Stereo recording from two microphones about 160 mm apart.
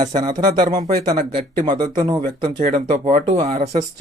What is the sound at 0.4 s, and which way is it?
Speech, 55° right (ahead or behind).